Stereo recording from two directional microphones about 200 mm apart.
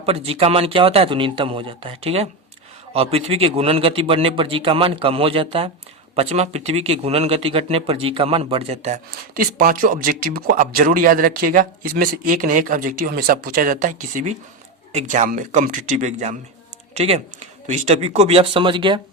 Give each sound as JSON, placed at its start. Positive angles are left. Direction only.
{"t": 0.0, "sound": "a man's voice", "side_deg": -30}
{"t": 9.0, "sound": "speech", "side_deg": -45}